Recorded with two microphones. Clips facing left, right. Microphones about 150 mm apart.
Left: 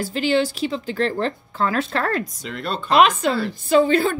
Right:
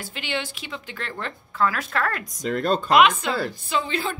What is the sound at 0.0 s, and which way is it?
Speech, 35° left (ahead or behind).